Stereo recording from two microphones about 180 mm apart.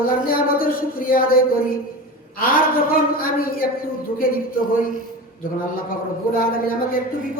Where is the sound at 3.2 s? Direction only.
55° left (ahead or behind).